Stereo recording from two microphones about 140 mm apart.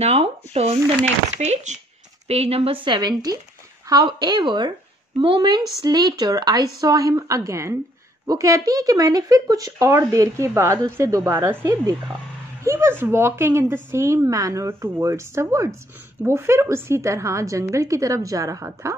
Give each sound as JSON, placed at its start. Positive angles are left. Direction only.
{"t": 0.0, "sound": "speech", "side_deg": -45}
{"t": 2.2, "sound": "a woman's voice", "side_deg": -45}